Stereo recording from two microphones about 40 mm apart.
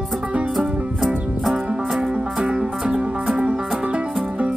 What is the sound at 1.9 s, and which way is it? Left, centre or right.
Music, right.